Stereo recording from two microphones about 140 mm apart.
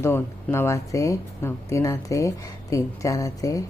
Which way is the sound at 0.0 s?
15° left (ahead or behind).